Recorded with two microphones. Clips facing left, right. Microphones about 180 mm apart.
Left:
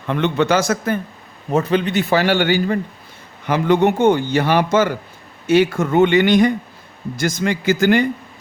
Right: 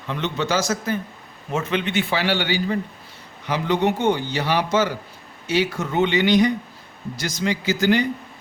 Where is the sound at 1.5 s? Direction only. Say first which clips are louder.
Left 6 dB; 35° left (ahead or behind).